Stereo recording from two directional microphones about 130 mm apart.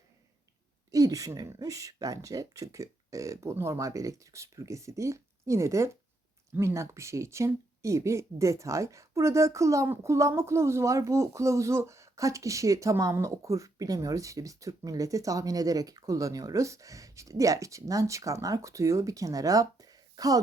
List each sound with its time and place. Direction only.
0.9 s speech: 25° right (ahead or behind)